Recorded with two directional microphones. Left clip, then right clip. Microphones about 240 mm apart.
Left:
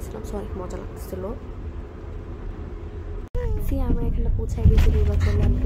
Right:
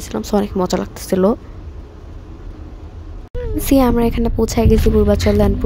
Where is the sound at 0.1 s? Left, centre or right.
Right.